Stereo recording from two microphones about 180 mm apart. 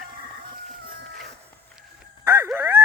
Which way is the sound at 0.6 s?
50° right (ahead or behind).